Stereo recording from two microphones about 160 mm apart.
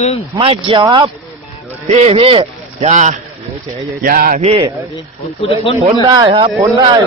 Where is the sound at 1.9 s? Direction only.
40° right (ahead or behind).